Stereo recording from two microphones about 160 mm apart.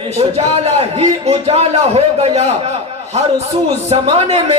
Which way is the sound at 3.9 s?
40° right (ahead or behind).